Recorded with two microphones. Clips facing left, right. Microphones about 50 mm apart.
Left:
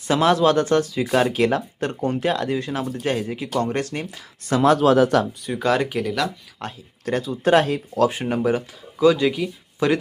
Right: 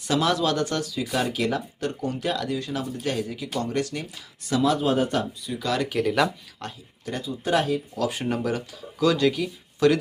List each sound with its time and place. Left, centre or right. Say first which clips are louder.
0.1 s speech: left 6 dB; left
4.8 s speech: left 7 dB; left
5.4 s speech: left 6 dB; left
7.0 s speech: left 8 dB; left
8.1 s speech: left 5 dB; left